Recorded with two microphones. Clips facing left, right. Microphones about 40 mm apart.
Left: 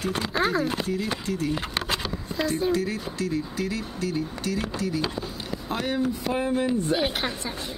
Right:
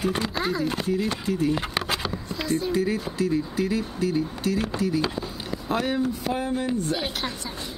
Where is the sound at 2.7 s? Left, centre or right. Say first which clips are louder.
Right 3 dB; centre.